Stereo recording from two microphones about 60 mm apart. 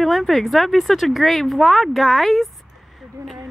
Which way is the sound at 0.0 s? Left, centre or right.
Centre.